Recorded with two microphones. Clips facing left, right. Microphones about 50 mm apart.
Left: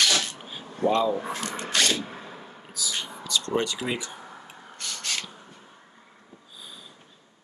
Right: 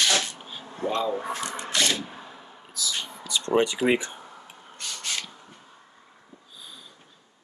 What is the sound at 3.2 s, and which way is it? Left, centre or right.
Speech, right.